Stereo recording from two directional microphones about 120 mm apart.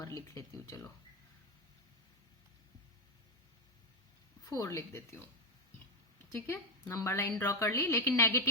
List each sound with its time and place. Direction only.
0.3 s a woman's voice: 25° left (ahead or behind)
4.4 s a woman's voice: 30° left (ahead or behind)
6.3 s a woman's voice: 20° left (ahead or behind)